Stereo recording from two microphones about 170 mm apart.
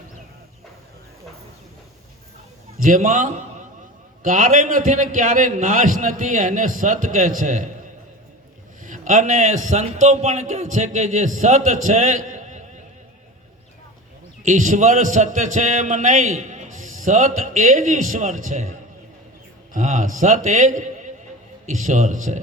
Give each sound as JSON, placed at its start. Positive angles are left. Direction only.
{"t": 2.7, "sound": "a man's voice", "side_deg": -50}
{"t": 8.8, "sound": "a man's voice", "side_deg": -45}
{"t": 14.4, "sound": "a man's voice", "side_deg": -50}